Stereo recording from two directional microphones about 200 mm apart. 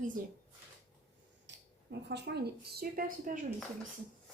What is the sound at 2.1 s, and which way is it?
A woman's voice, 55° right (ahead or behind).